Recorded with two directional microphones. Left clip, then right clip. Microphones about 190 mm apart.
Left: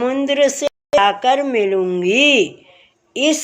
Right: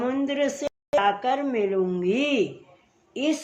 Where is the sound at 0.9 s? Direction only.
35° left (ahead or behind).